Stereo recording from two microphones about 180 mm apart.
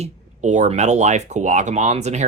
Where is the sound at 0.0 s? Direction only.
40° right (ahead or behind).